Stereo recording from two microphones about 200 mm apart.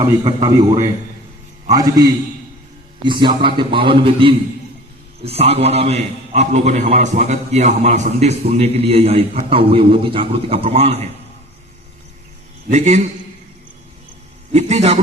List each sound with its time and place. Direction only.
0.0 s a man's voice: 20° right (ahead or behind)
12.7 s a man's voice: 35° right (ahead or behind)
14.5 s a man's voice: 35° right (ahead or behind)